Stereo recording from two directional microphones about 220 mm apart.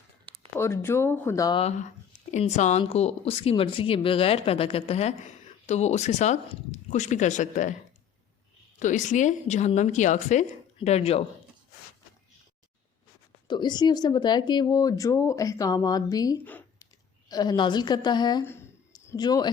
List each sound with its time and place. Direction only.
0.5 s speech: 10° left (ahead or behind)
1.6 s speech: 35° left (ahead or behind)
8.8 s a woman's voice: 35° left (ahead or behind)
13.5 s speech: 20° left (ahead or behind)